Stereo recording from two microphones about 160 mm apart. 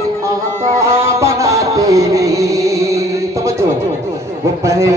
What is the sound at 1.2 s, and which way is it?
Music, 20° right (ahead or behind).